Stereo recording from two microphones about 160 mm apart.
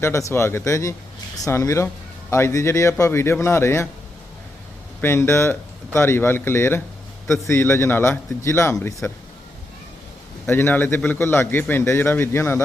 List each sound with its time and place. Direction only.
0.0 s a man's voice: 20° left (ahead or behind)
4.9 s a man's voice: 15° left (ahead or behind)
10.4 s a man's voice: 15° left (ahead or behind)